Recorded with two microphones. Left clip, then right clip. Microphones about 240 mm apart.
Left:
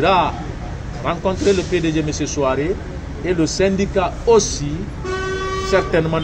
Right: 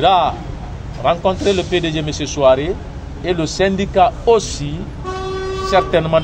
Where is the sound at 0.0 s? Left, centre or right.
Right.